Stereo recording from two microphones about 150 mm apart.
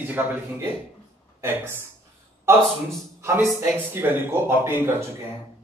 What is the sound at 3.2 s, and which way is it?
A man's voice, 15° right (ahead or behind).